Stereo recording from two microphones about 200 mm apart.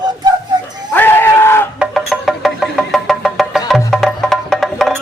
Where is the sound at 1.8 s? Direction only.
Centre (ahead or behind).